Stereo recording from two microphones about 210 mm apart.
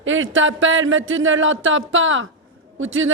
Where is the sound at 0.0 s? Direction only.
65° right (ahead or behind).